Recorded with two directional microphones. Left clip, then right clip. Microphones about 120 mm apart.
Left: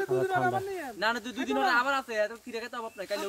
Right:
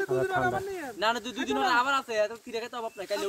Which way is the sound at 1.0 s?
5° right (ahead or behind).